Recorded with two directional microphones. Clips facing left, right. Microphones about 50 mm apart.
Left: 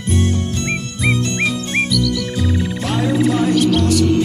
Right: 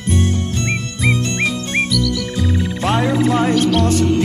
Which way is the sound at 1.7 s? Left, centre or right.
Centre.